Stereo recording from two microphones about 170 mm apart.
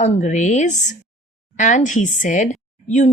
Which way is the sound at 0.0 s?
45° left (ahead or behind).